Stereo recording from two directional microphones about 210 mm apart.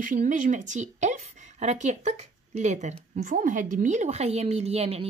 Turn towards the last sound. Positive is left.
turn(degrees=-30)  # may be behind; listen again after turning